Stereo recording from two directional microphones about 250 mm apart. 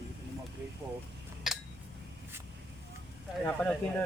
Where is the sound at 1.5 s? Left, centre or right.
Centre.